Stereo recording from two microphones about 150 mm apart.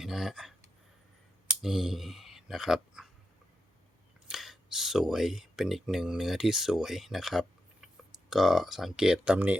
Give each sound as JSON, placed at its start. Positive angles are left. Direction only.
{"t": 0.0, "sound": "speech", "side_deg": 0}
{"t": 4.3, "sound": "speech", "side_deg": 0}